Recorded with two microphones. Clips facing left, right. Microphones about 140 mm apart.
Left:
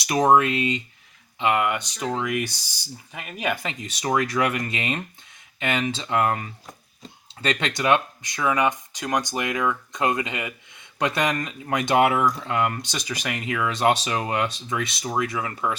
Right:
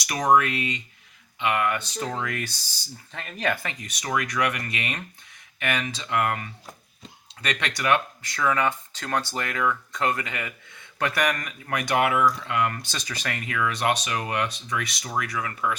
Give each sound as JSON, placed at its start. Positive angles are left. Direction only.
{"t": 0.0, "sound": "speech", "side_deg": 25}